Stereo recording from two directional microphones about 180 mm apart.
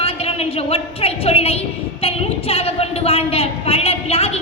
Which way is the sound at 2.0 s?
35° left (ahead or behind).